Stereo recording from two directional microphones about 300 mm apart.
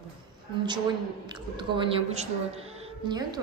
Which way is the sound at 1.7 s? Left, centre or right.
Centre.